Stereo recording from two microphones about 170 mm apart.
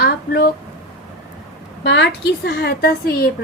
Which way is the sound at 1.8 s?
90° left.